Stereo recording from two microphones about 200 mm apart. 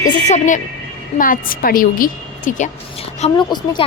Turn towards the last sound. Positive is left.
turn(degrees=20)  # may be behind; listen again after turning